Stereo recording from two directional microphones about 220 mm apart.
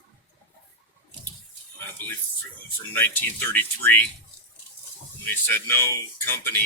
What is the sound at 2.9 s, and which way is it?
Speech, 10° left (ahead or behind).